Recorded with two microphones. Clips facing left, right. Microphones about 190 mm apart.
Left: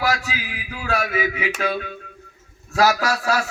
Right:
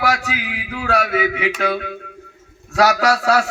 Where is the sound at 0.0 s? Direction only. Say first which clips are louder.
Right 3 dB; 70° right (ahead or behind).